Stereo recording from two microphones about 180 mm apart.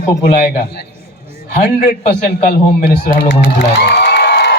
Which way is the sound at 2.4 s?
50° left (ahead or behind).